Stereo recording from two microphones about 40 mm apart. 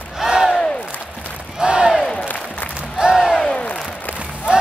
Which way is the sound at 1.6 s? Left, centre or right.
Right.